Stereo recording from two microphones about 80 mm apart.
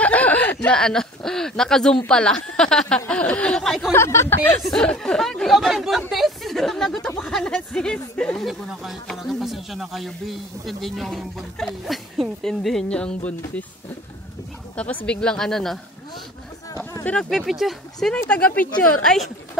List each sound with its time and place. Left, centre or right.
0.0 s snicker: centre
0.7 s speech: centre
3.9 s speech: left
4.6 s a man's voice: centre
8.5 s a man's voice: centre
15.0 s speech: centre
17.2 s a man's voice: centre
18.3 s speech: centre
19.0 s a man's voice: centre